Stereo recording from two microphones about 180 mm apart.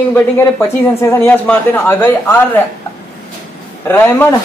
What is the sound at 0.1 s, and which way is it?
Speech, 15° left (ahead or behind).